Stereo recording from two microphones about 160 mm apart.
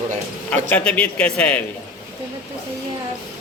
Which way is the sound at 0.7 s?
5° left (ahead or behind).